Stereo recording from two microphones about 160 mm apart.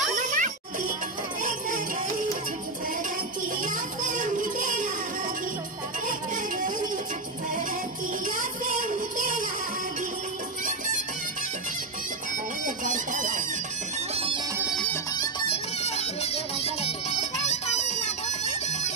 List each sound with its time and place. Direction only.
0.1 s music: 55° right (ahead or behind)
3.6 s a sound: 55° right (ahead or behind)
6.0 s music: 55° right (ahead or behind)
8.3 s music: 55° right (ahead or behind)
12.6 s bagpipes: 55° right (ahead or behind)
14.1 s music: 35° right (ahead or behind)
15.5 s music: 40° left (ahead or behind)